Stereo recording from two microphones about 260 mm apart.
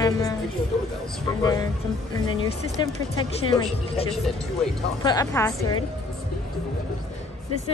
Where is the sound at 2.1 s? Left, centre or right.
Centre.